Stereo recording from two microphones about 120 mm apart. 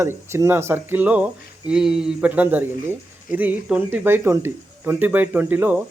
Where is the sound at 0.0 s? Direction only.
20° right (ahead or behind).